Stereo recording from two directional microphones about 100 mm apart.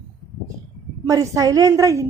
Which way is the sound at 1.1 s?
35° right (ahead or behind).